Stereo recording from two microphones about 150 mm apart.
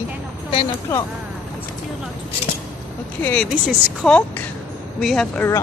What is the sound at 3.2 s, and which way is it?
Speech, 10° left (ahead or behind).